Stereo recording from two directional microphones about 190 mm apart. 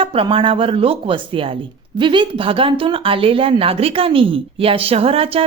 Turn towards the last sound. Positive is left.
turn(degrees=-30)  # may be behind; listen again after turning